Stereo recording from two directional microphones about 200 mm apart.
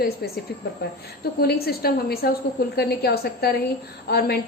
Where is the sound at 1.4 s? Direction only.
50° left (ahead or behind).